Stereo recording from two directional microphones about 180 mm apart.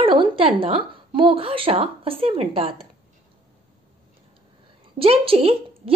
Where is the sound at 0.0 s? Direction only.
30° right (ahead or behind).